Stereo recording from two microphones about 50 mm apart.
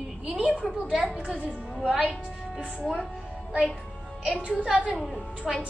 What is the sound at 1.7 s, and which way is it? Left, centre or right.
Speech, centre.